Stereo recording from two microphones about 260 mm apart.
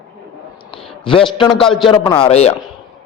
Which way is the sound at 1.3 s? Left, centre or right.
Centre.